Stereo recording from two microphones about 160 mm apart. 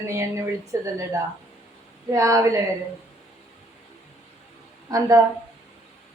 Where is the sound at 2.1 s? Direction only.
20° right (ahead or behind).